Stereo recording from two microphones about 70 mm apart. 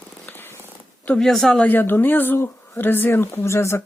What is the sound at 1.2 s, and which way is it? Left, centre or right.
Speech, centre.